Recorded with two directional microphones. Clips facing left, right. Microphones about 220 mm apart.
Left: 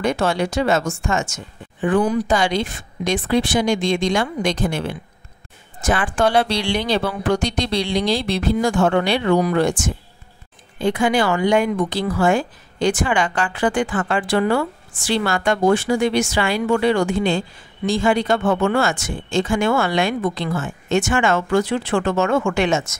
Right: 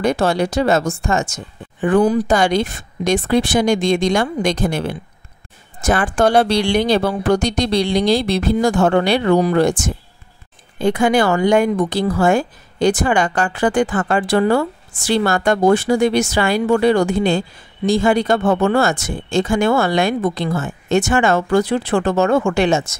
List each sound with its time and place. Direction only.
0.0 s speech: 35° right (ahead or behind)